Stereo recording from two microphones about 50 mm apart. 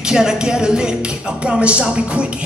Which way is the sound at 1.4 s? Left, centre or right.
Right.